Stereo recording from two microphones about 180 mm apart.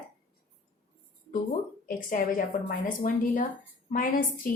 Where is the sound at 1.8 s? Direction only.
50° left (ahead or behind).